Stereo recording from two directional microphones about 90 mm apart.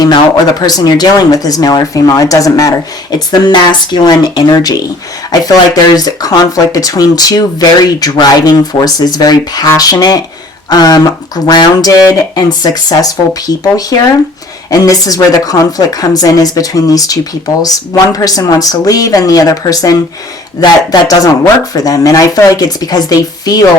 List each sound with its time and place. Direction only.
0.6 s a woman's voice: 45° left (ahead or behind)